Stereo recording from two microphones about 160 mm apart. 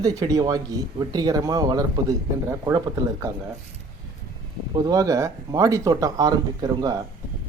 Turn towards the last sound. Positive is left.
turn(degrees=-25)  # may be behind; listen again after turning